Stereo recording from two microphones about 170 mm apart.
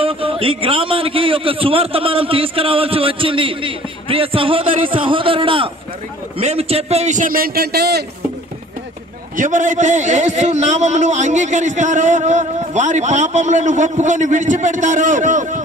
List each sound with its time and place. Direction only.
0.0 s a man's voice: 30° right (ahead or behind); by 8.0 s 70° right (ahead or behind)
9.4 s a man's voice: 50° right (ahead or behind)